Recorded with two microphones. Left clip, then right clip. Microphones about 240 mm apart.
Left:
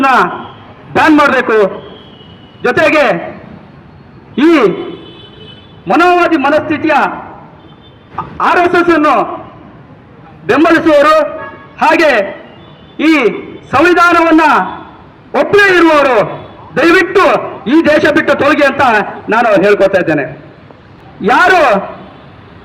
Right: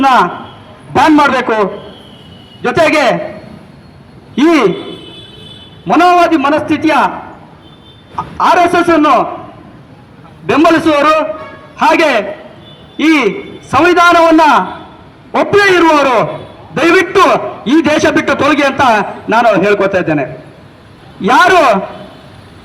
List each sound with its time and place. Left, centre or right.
0.9 s a man's voice: right
4.4 s a man's voice: right
5.8 s a man's voice: right
8.1 s a man's voice: right
10.4 s a man's voice: right